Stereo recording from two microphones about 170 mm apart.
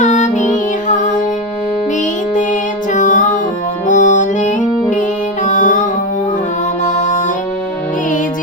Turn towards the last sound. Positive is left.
turn(degrees=45)  # may be behind; listen again after turning